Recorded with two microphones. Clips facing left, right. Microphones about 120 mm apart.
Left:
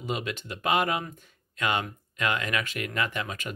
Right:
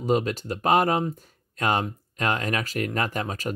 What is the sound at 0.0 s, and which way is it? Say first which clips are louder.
Speech: right 9 dB; 40° right (ahead or behind).